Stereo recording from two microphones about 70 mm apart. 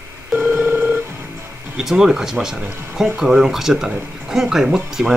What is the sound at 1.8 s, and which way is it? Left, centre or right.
Speech, centre.